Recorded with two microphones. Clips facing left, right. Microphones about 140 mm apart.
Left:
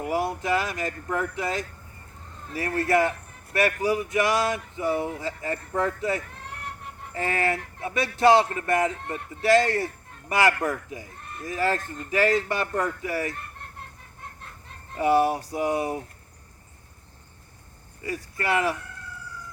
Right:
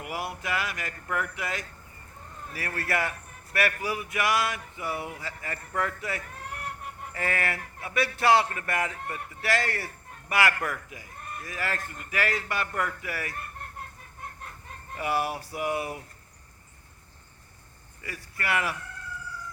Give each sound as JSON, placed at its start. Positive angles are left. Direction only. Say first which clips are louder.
{"t": 0.0, "sound": "a man's voice", "louder": "left 8 dB", "side_deg": 30}
{"t": 14.9, "sound": "a man's voice", "louder": "left 8 dB", "side_deg": 25}
{"t": 18.0, "sound": "a man's voice", "louder": "left 6 dB", "side_deg": 25}